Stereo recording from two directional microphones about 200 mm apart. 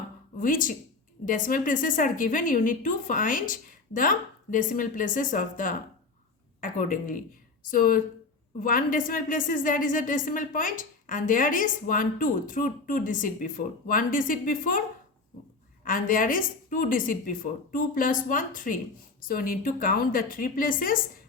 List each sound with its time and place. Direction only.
0.3 s a woman's voice: 45° left (ahead or behind)
15.8 s a woman's voice: 45° left (ahead or behind)